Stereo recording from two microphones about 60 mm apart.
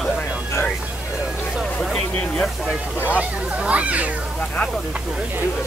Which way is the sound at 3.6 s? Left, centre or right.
Right.